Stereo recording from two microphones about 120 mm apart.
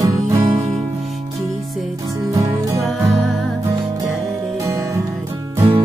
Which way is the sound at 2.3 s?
25° right (ahead or behind).